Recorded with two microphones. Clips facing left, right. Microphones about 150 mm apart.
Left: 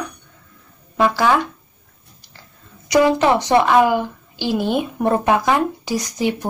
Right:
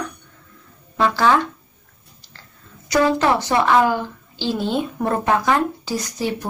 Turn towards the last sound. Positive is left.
turn(degrees=15)  # may be behind; listen again after turning